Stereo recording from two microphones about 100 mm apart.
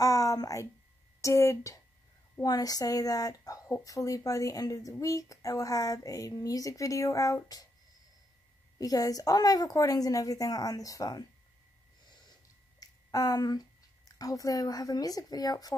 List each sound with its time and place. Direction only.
0.0 s a sound: 35° left (ahead or behind)
1.2 s speech: 30° left (ahead or behind)
2.4 s speech: 40° left (ahead or behind)
8.7 s speech: 35° left (ahead or behind)
12.8 s a sound: 35° left (ahead or behind)
14.1 s speech: 35° left (ahead or behind)